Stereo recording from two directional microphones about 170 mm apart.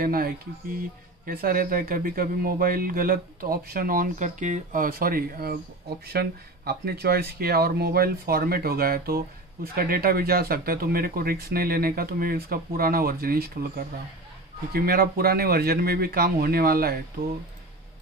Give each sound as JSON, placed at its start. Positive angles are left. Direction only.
{"t": 0.0, "sound": "speech", "side_deg": -60}